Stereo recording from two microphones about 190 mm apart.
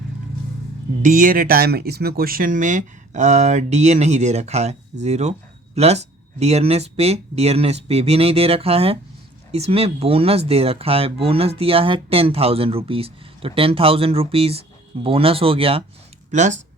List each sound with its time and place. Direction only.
1.0 s speech: 45° right (ahead or behind)
16.3 s speech: 40° right (ahead or behind)